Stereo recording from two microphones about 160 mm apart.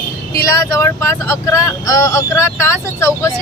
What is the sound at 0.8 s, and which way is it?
Speech, 15° left (ahead or behind).